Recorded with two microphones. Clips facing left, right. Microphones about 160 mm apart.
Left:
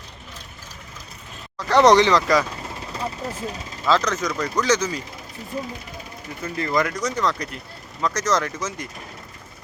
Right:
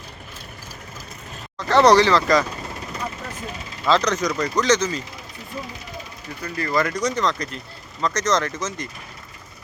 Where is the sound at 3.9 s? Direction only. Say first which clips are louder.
Right 1 dB; 5° left (ahead or behind).